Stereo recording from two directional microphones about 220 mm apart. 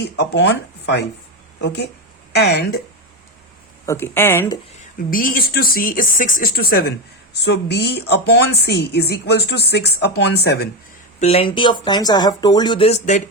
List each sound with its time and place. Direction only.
0.0 s speech: 50° left (ahead or behind)
1.6 s speech: 50° left (ahead or behind)
3.8 s speech: 10° left (ahead or behind)
5.1 s speech: 40° left (ahead or behind)
11.2 s speech: 25° left (ahead or behind)